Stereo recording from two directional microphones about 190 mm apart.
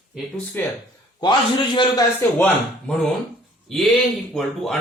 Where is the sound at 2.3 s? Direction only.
10° left (ahead or behind).